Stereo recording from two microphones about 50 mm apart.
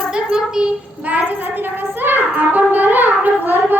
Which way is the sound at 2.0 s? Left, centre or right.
Right.